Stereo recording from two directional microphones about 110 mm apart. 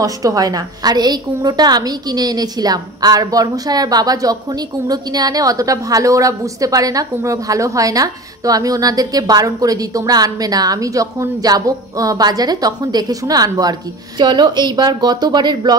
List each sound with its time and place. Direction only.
0.0 s a woman's voice: 30° right (ahead or behind)